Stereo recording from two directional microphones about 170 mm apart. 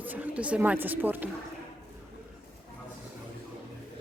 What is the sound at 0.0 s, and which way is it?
Speech, 10° right (ahead or behind).